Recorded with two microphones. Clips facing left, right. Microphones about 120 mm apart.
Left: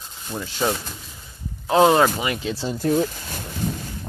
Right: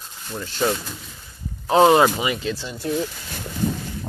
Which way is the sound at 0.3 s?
10° left (ahead or behind).